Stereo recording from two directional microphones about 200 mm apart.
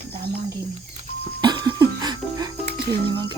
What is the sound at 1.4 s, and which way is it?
Music, 20° right (ahead or behind).